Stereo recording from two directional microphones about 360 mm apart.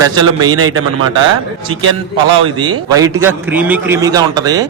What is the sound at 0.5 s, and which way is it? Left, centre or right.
Speech, right.